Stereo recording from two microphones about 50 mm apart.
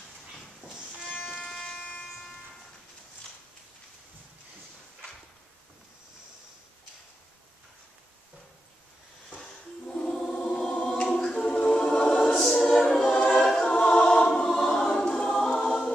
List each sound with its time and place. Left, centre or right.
0.6 s music: centre
1.0 s music: left
1.4 s train: centre
9.9 s choir: centre
11.1 s a capella: centre
11.5 s choir: centre
12.3 s choir: centre
13.4 s choir: centre
13.7 s choir: centre